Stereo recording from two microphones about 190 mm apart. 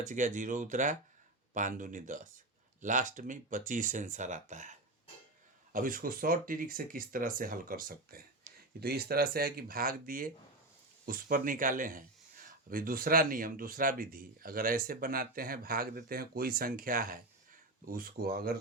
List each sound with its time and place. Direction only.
0.0 s speech: 40° right (ahead or behind)